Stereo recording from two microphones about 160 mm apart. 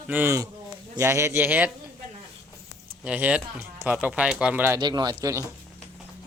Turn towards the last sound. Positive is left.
turn(degrees=-20)  # may be behind; listen again after turning